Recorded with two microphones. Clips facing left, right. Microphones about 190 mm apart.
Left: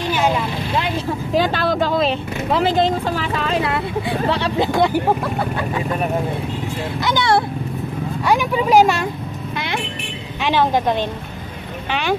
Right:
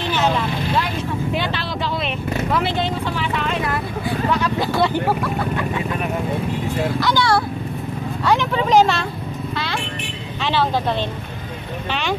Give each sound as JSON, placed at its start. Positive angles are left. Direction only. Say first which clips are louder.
{"t": 0.1, "sound": "vehicle", "louder": "even", "side_deg": 10}
{"t": 1.3, "sound": "speech", "louder": "left 6 dB", "side_deg": 45}
{"t": 4.6, "sound": "speech", "louder": "left 3 dB", "side_deg": 15}
{"t": 7.0, "sound": "speech", "louder": "left 3 dB", "side_deg": 20}
{"t": 8.3, "sound": "speech", "louder": "left 1 dB", "side_deg": 10}
{"t": 10.4, "sound": "speech", "louder": "left 3 dB", "side_deg": 15}